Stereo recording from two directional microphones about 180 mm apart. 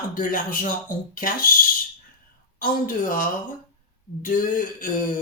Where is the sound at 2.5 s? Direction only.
50° left (ahead or behind).